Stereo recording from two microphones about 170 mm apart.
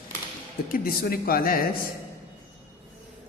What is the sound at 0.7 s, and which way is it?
Speech, 60° left (ahead or behind).